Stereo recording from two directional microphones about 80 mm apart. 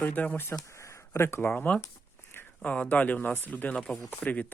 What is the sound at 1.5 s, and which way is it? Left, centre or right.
Speech, centre.